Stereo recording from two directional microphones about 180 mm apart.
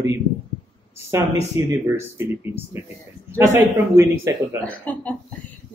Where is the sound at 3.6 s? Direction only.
15° right (ahead or behind).